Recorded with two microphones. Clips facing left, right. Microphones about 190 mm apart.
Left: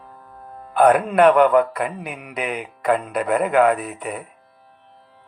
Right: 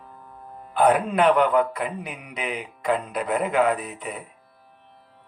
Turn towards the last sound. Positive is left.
turn(degrees=60)  # may be behind; listen again after turning